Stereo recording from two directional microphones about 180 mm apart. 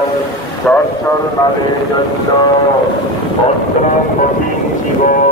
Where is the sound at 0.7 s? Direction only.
5° left (ahead or behind).